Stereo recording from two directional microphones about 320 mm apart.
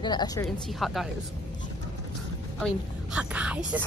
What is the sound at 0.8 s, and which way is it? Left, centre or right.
Speech, centre.